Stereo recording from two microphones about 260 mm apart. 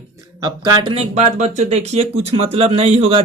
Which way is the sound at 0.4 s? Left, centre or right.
Centre.